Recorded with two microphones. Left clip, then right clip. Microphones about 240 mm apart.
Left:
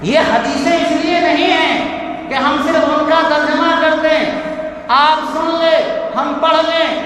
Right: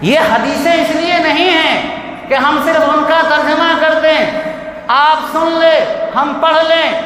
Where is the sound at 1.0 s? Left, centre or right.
Right.